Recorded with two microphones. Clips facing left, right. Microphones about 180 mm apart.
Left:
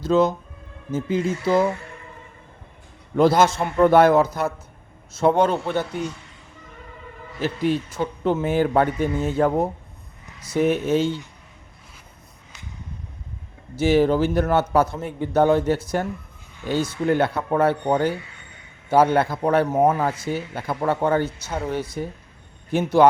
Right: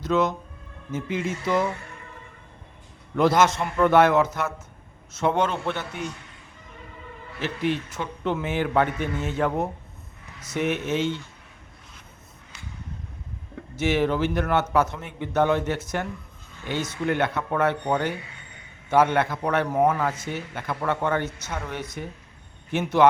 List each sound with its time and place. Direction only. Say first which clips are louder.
0.0 s a man's voice: left 4 dB; 30° left (ahead or behind)
3.2 s a man's voice: left 3 dB; 30° left (ahead or behind)
7.4 s a man's voice: left 4 dB; 40° left (ahead or behind)
13.7 s a man's voice: left 5 dB; 30° left (ahead or behind)